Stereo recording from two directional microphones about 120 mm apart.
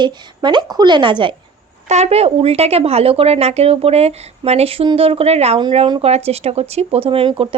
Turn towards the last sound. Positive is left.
turn(degrees=-50)  # may be behind; listen again after turning